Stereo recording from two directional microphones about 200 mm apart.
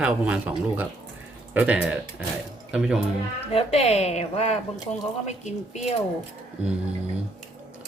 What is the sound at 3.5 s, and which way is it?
A woman's voice, 30° left (ahead or behind).